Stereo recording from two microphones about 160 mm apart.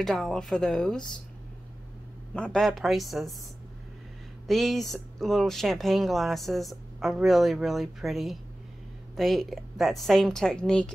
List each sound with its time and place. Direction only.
0.0 s speech: 5° left (ahead or behind)
2.3 s speech: 5° left (ahead or behind)
4.5 s speech: centre (ahead or behind)